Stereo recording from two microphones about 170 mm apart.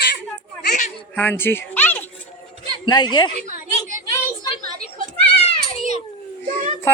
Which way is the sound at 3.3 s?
45° right (ahead or behind).